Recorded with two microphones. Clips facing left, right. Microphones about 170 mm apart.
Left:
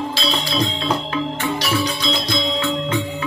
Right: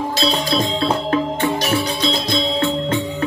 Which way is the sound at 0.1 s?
45° right (ahead or behind).